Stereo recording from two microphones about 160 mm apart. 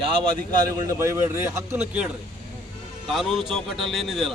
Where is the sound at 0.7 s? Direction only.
20° right (ahead or behind).